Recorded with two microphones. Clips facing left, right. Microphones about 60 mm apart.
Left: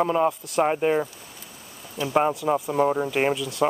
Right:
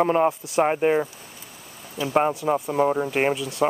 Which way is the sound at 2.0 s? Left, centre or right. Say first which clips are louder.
Right 1 dB; centre.